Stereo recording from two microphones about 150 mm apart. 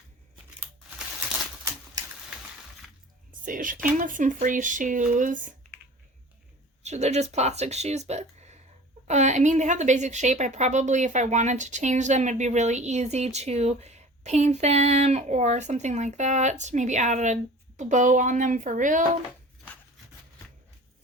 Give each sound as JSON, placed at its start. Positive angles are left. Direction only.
{"t": 3.4, "sound": "speech", "side_deg": -65}
{"t": 6.8, "sound": "a woman's voice", "side_deg": -50}